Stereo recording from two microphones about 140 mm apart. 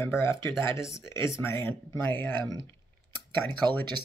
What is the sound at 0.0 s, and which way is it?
Speech, 20° left (ahead or behind).